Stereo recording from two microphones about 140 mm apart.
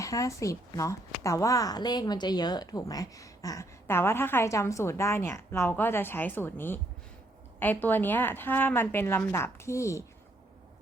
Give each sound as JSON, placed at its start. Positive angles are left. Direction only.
{"t": 0.0, "sound": "a woman's voice", "side_deg": 25}